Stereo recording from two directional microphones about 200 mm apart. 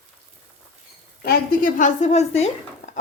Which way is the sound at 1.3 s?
40° left (ahead or behind).